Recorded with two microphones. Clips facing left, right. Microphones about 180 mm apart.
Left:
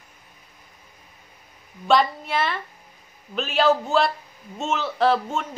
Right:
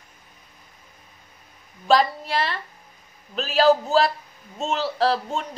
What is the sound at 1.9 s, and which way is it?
Speech, centre (ahead or behind).